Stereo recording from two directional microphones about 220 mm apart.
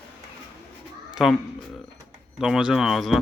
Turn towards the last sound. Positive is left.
turn(degrees=0)  # may be behind; listen again after turning